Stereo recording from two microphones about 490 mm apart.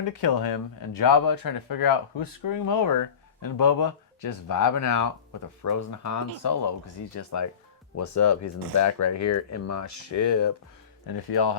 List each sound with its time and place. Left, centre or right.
0.1 s speech: left